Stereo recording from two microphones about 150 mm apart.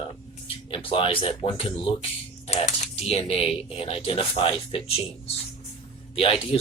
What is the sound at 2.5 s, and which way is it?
Speech, 50° left (ahead or behind).